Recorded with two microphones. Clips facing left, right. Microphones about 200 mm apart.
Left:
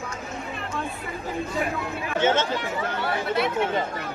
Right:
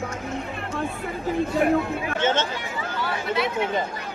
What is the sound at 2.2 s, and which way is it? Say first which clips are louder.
Chatter: left 2 dB; 10° left (ahead or behind).